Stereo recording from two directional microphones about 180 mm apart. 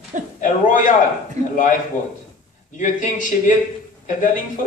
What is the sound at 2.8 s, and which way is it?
A man's voice, 45° left (ahead or behind).